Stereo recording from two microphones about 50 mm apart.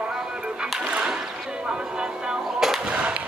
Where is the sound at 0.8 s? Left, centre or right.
Right.